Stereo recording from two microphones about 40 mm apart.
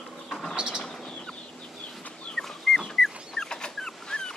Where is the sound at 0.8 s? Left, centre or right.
Centre.